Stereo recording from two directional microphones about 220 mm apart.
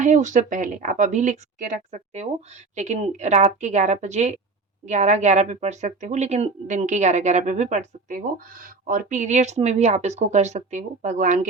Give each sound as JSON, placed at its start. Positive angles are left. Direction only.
{"t": 0.0, "sound": "a woman's voice", "side_deg": -35}